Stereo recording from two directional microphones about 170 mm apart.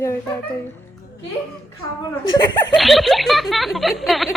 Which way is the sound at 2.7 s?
Centre (ahead or behind).